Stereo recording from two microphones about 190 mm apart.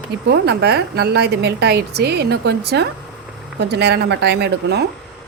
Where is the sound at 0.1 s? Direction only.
60° right (ahead or behind).